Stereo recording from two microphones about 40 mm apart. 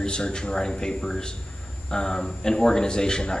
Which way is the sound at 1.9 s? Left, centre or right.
Centre.